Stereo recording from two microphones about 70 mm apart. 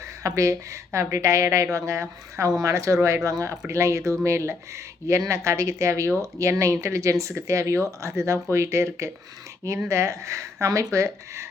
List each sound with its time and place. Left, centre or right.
0.2 s speech: right